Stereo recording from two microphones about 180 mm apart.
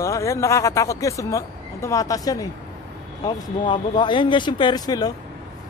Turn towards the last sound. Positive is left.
turn(degrees=20)  # may be behind; listen again after turning